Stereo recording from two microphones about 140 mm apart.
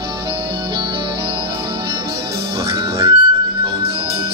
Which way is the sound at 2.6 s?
25° right (ahead or behind).